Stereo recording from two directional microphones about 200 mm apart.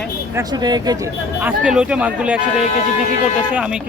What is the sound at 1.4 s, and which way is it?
Speech, 5° right (ahead or behind).